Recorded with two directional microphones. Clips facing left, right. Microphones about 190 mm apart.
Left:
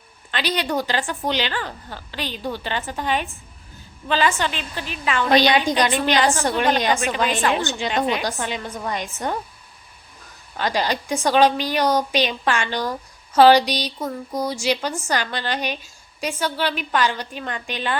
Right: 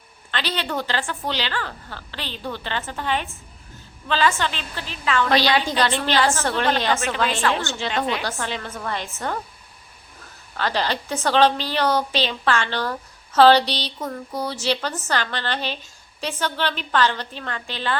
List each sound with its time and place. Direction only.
0.3 s a woman's voice: 15° left (ahead or behind)
10.6 s a woman's voice: 15° left (ahead or behind)